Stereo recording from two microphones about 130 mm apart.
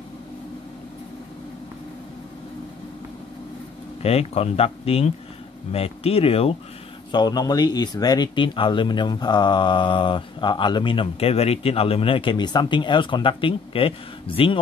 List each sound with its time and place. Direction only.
4.0 s speech: 50° left (ahead or behind)
7.1 s speech: 35° left (ahead or behind)